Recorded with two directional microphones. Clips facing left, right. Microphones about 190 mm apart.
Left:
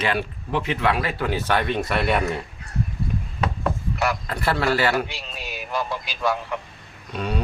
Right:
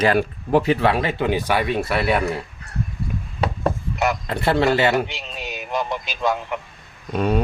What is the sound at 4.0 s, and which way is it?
A man's voice, 20° right (ahead or behind).